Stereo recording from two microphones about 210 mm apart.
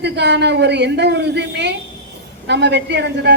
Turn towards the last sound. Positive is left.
turn(degrees=-55)  # may be behind; listen again after turning